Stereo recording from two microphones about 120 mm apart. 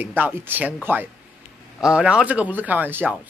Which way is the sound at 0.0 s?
15° right (ahead or behind).